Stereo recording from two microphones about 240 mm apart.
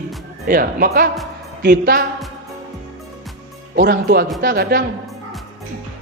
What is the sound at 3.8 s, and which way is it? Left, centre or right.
A woman's voice, right.